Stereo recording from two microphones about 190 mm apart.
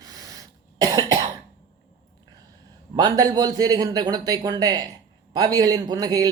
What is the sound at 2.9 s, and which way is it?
A man's voice, 20° right (ahead or behind).